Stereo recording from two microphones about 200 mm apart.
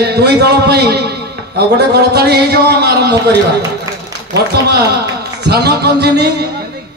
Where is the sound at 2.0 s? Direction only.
55° right (ahead or behind).